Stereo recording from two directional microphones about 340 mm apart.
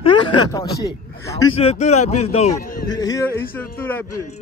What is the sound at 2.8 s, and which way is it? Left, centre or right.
A man's voice, centre.